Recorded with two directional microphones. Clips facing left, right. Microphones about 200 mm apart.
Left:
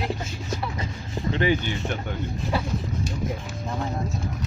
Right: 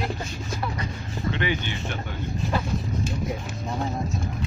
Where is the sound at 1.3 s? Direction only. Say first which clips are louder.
Left 5 dB; 40° left (ahead or behind).